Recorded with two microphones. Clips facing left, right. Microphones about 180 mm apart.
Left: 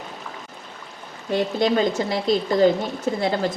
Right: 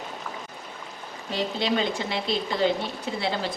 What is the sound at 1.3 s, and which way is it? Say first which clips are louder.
A woman's voice: left 6 dB; 50° left (ahead or behind).